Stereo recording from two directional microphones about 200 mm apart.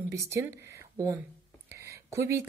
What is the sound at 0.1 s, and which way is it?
Speech, 15° right (ahead or behind).